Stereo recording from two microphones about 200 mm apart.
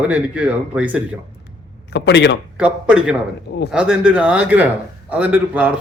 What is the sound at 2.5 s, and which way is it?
A man's voice, 5° right (ahead or behind).